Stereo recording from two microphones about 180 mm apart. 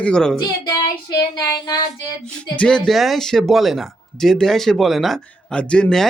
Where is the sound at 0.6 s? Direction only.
25° left (ahead or behind).